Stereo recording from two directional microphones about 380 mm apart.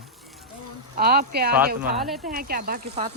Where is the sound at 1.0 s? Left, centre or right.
Right.